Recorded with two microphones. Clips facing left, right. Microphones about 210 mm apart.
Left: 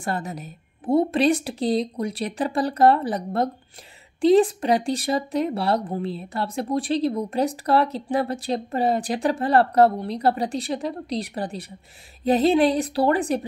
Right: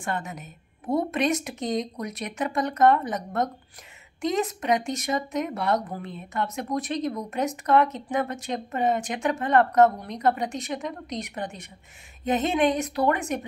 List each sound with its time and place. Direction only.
0.0 s speech: 35° left (ahead or behind)